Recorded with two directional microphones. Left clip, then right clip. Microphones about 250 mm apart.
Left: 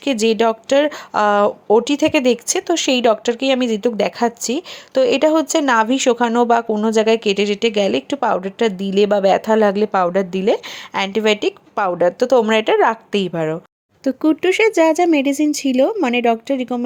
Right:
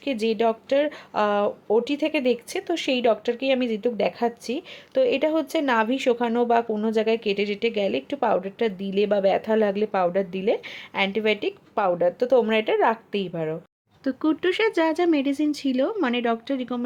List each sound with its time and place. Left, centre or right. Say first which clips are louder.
0.0 s speech: left 7 dB; left